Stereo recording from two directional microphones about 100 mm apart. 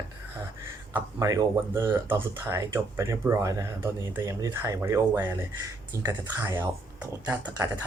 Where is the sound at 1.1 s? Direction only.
35° right (ahead or behind).